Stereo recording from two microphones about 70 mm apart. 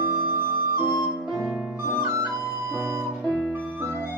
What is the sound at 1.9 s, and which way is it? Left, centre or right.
Flute, right.